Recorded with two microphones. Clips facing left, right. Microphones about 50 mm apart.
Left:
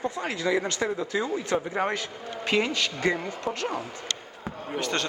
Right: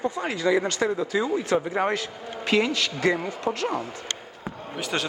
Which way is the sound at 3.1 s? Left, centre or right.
Centre.